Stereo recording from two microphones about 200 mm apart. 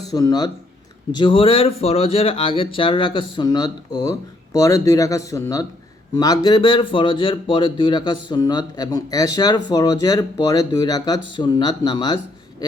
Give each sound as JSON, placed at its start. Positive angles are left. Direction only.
{"t": 0.1, "sound": "speech", "side_deg": 20}